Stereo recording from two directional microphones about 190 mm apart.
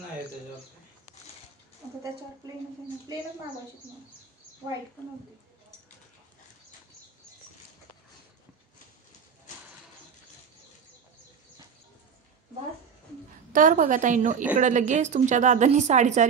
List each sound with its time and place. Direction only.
13.5 s a woman's voice: 45° right (ahead or behind)